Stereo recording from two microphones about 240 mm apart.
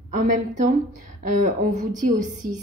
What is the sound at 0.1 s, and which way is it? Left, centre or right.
A woman's voice, right.